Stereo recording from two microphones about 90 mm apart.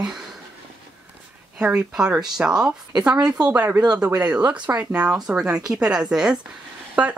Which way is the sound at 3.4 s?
20° right (ahead or behind).